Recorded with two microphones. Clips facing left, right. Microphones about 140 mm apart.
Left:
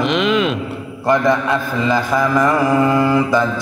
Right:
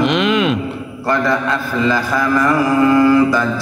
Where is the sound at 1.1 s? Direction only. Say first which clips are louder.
Left 2 dB; 20° left (ahead or behind).